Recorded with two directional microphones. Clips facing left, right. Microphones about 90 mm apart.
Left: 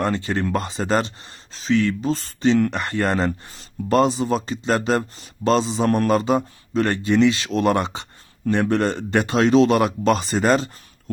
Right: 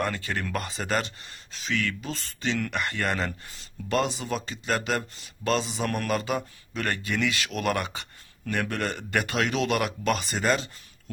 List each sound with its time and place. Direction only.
0.0 s speech: 25° left (ahead or behind)